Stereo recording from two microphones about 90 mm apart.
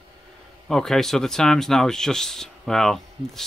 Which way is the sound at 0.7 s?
5° left (ahead or behind).